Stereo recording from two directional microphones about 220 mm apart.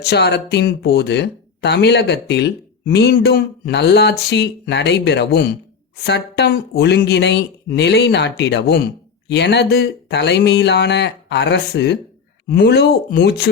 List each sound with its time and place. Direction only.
0.0 s speech: 50° left (ahead or behind)